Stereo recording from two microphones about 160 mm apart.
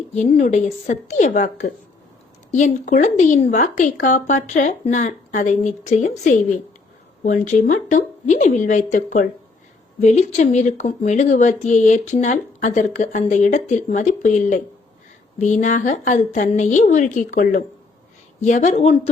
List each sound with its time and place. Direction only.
0.1 s speech: 45° left (ahead or behind)
10.0 s speech: 45° left (ahead or behind)